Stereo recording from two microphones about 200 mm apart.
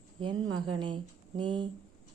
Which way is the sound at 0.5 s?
25° right (ahead or behind).